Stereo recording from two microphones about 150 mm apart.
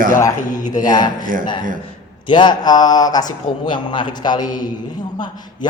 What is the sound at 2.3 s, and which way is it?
A man's voice, 30° left (ahead or behind).